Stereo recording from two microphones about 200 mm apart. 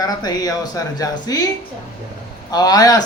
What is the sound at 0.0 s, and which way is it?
A man's voice, 20° left (ahead or behind).